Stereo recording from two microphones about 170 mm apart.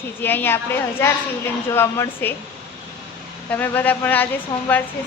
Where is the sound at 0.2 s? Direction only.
10° left (ahead or behind).